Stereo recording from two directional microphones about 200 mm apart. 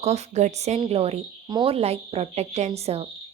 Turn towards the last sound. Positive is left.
turn(degrees=-30)  # may be behind; listen again after turning